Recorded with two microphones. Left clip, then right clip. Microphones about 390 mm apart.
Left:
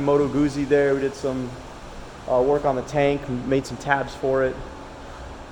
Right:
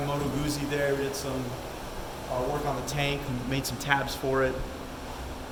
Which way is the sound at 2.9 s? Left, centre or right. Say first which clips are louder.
Left 9 dB; centre.